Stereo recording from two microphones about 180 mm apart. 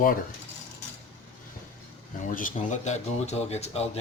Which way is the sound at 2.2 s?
45° left (ahead or behind).